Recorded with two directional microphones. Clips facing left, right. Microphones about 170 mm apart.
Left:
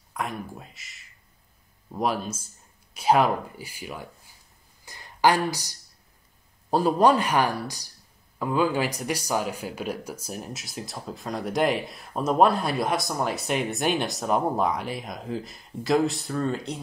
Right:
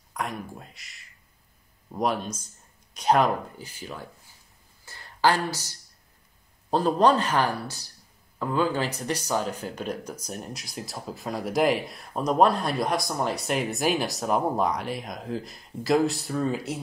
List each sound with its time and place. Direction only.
0.1 s speech: centre (ahead or behind)
4.8 s a sound: 15° left (ahead or behind)
6.7 s speech: 10° left (ahead or behind); by 16.8 s 5° right (ahead or behind)